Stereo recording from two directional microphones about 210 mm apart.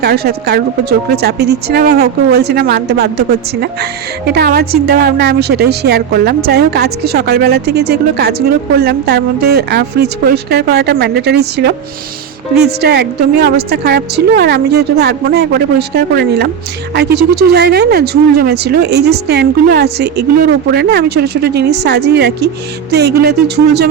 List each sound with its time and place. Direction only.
0.0 s a woman's voice: 50° right (ahead or behind)